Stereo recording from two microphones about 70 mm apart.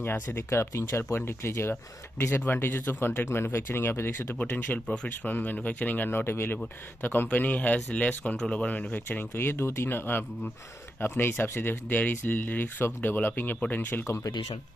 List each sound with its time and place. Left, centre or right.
0.0 s speech: left